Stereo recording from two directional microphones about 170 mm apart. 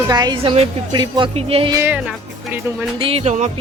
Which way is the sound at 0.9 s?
25° right (ahead or behind).